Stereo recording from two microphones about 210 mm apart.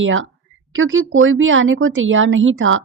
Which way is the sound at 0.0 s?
70° right (ahead or behind).